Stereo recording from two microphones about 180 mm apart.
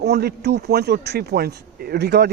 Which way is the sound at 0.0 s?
65° right (ahead or behind).